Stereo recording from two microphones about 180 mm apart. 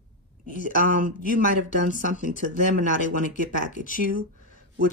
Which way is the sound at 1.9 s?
45° left (ahead or behind).